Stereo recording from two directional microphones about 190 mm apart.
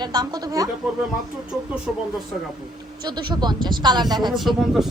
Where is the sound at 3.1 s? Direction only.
25° right (ahead or behind).